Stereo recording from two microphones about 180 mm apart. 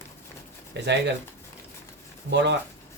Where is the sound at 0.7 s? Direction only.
80° right.